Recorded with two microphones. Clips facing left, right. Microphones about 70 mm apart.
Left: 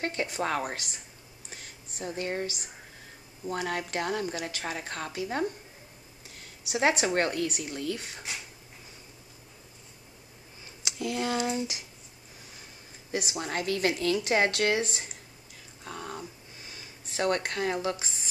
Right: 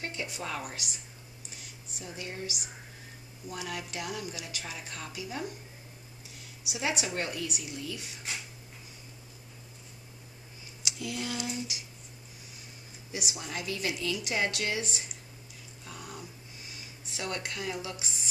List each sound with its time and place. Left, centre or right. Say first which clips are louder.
0.0 s a woman's voice: left 7 dB; left
6.7 s a woman's voice: left 8 dB; left
10.8 s speech: left 5 dB; left
13.1 s a woman's voice: left 6 dB; left
15.8 s a sound: left 6 dB; left
16.7 s speech: left 9 dB; left